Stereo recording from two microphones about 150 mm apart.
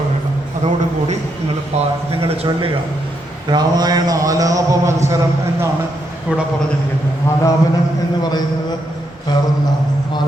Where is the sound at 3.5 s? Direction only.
25° right (ahead or behind).